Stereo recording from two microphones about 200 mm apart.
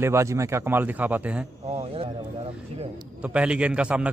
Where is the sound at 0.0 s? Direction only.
15° right (ahead or behind).